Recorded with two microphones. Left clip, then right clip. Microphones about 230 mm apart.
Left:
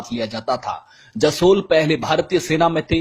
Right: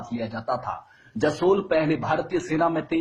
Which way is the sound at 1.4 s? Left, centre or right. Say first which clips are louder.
Left 6 dB; left.